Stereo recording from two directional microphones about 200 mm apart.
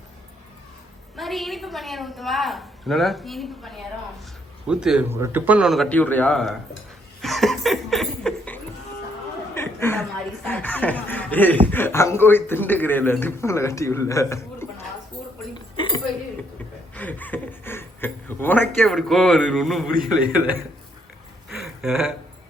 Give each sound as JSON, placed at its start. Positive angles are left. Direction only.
{"t": 1.1, "sound": "a woman's voice", "side_deg": 0}
{"t": 7.2, "sound": "laughter", "side_deg": 0}
{"t": 9.6, "sound": "speech", "side_deg": 10}
{"t": 15.5, "sound": "cutlery", "side_deg": 25}
{"t": 16.9, "sound": "speech", "side_deg": 10}
{"t": 21.5, "sound": "a sound", "side_deg": 0}